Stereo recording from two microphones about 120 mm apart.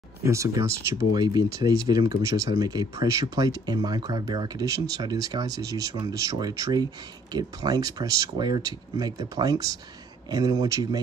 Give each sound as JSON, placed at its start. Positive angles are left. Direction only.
{"t": 0.2, "sound": "speech", "side_deg": -25}